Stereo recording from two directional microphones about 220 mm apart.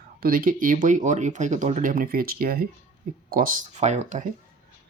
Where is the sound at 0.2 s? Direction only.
40° right (ahead or behind).